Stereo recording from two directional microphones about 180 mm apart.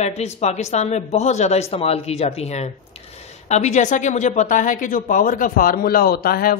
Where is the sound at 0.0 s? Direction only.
35° left (ahead or behind).